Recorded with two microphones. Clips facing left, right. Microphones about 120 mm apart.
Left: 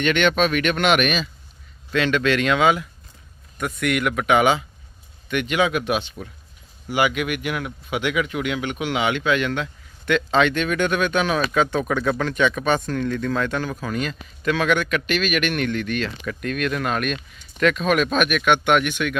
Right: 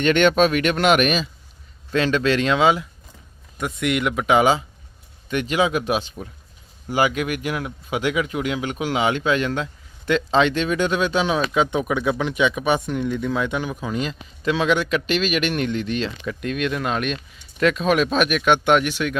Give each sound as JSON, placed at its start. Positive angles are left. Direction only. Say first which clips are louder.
{"t": 0.0, "sound": "speech", "louder": "right 3 dB", "side_deg": -35}